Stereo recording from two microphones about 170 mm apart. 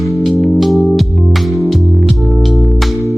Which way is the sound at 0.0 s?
Centre (ahead or behind).